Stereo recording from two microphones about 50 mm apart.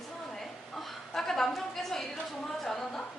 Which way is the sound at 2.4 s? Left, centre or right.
Centre.